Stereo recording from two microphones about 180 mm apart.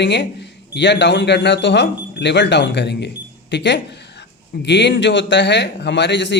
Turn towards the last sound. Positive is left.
turn(degrees=80)